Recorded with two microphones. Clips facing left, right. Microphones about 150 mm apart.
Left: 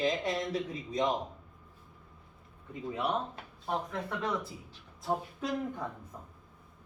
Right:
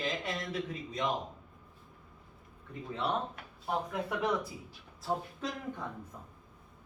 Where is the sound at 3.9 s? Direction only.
10° right (ahead or behind).